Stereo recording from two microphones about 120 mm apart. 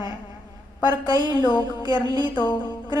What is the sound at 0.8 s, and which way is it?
A woman's voice, 35° left (ahead or behind).